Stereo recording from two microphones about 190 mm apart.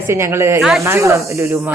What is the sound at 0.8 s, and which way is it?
Speech, 15° right (ahead or behind).